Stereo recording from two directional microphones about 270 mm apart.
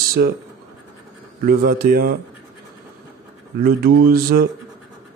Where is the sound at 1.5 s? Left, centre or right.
Right.